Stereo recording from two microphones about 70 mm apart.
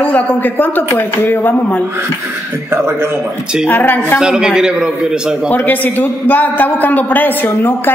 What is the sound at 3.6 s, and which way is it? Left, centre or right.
Speech, left.